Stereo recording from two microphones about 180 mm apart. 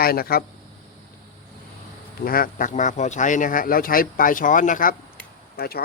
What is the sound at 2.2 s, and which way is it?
Speech, 55° left (ahead or behind).